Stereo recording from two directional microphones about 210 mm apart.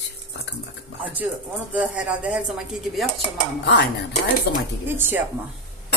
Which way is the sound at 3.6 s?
50° left (ahead or behind).